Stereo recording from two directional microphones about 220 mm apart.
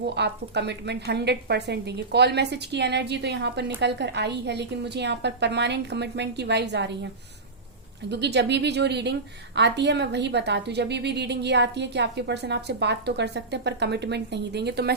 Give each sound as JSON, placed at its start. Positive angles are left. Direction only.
{"t": 0.1, "sound": "a woman's voice", "side_deg": -50}
{"t": 8.1, "sound": "a woman's voice", "side_deg": -50}